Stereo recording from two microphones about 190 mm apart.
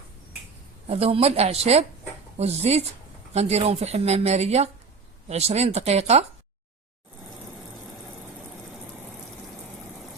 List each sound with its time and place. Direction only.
0.9 s speech: 30° right (ahead or behind)